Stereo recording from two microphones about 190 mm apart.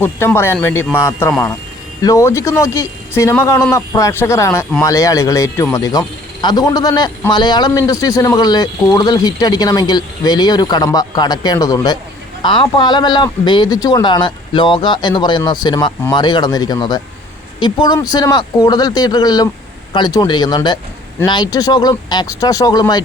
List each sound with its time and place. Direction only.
0.0 s a man's voice: 10° left (ahead or behind)